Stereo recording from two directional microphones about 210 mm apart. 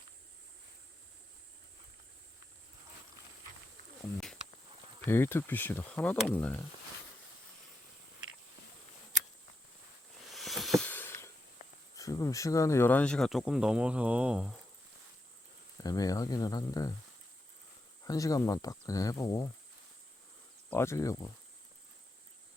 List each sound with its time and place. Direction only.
5.0 s speech: 10° left (ahead or behind)
10.2 s a sound: centre (ahead or behind)
11.9 s speech: 15° left (ahead or behind); by 14.6 s 5° right (ahead or behind)
15.8 s speech: 15° left (ahead or behind)
18.0 s speech: 15° left (ahead or behind)
20.7 s speech: 10° left (ahead or behind)